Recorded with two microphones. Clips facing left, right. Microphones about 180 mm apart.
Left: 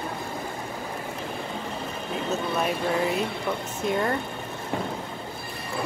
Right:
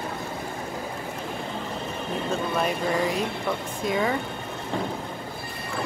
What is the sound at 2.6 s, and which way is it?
Speech, 5° left (ahead or behind).